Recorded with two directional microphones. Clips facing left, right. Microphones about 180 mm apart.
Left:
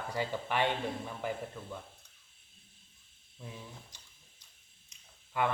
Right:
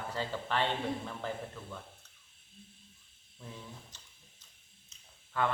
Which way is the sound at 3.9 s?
15° left (ahead or behind).